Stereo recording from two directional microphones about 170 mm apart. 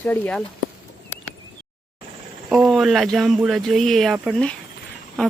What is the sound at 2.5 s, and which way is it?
Speech, centre (ahead or behind).